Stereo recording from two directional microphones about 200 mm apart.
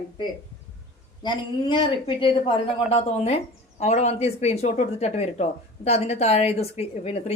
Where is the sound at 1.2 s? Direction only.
25° left (ahead or behind).